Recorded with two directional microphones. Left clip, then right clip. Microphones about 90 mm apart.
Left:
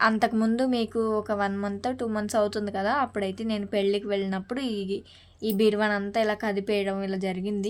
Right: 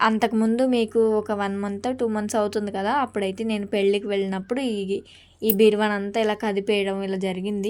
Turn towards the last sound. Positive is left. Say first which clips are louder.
# right 3 dB
turn(degrees=-25)  # may be behind; listen again after turning